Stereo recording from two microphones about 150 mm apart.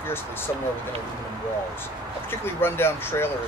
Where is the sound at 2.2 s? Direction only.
15° left (ahead or behind).